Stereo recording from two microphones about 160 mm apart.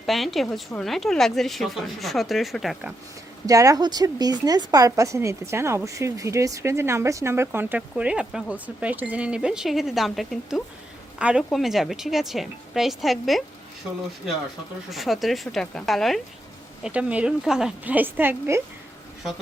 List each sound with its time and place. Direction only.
0.0 s a woman's voice: centre (ahead or behind)
3.4 s a woman's voice: 20° right (ahead or behind); by 13.4 s centre (ahead or behind)
14.8 s a woman's voice: centre (ahead or behind)